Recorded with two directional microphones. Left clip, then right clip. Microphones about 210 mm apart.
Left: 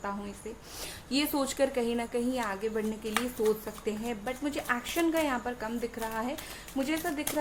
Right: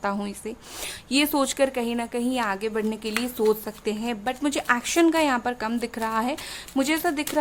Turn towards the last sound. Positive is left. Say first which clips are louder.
# right 8 dB
turn(degrees=-50)  # may be behind; listen again after turning